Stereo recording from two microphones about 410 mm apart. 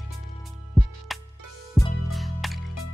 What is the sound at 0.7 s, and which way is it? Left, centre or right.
Music, centre.